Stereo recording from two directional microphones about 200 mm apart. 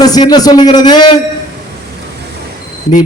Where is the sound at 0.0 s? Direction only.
20° left (ahead or behind).